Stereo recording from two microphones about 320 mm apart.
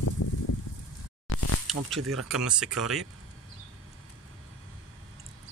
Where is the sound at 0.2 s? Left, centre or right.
Left.